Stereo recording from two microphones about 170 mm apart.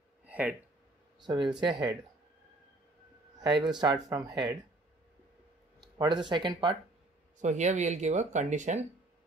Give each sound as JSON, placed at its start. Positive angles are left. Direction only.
{"t": 0.3, "sound": "a sound", "side_deg": -10}
{"t": 1.2, "sound": "speech", "side_deg": -30}
{"t": 3.3, "sound": "speech", "side_deg": -25}
{"t": 5.9, "sound": "speech", "side_deg": -25}
{"t": 7.3, "sound": "speech", "side_deg": -45}